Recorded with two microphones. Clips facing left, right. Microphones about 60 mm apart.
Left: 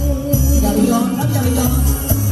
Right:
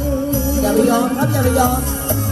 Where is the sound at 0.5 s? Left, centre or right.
Right.